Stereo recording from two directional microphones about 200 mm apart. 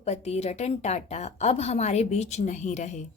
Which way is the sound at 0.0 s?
35° left (ahead or behind).